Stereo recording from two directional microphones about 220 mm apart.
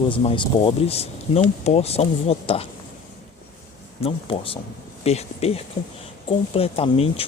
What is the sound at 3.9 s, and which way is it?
Speech, 25° left (ahead or behind).